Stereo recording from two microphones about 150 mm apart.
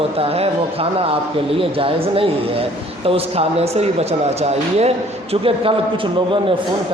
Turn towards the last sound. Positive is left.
turn(degrees=-40)  # may be behind; listen again after turning